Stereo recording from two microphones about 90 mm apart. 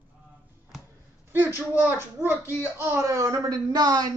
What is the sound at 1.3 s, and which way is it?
A woman's voice, 20° right (ahead or behind).